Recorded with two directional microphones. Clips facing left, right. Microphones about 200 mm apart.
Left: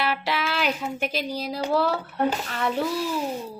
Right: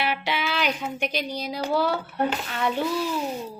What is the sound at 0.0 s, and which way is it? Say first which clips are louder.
Speech: left 1 dB; centre (ahead or behind).